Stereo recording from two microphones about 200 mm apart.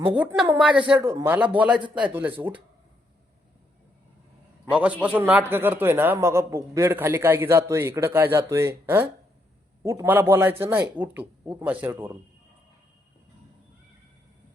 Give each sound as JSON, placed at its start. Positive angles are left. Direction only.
{"t": 0.1, "sound": "a man's voice", "side_deg": -10}
{"t": 4.7, "sound": "a man's voice", "side_deg": -5}